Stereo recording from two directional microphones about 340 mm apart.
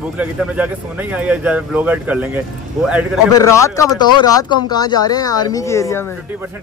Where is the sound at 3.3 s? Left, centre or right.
Centre.